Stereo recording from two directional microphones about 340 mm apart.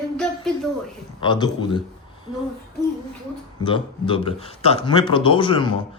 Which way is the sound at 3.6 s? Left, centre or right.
Centre.